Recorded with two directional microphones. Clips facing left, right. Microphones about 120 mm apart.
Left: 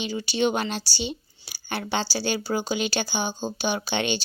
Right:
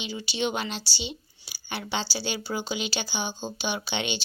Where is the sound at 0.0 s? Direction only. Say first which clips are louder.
Left 5 dB; 45° left (ahead or behind).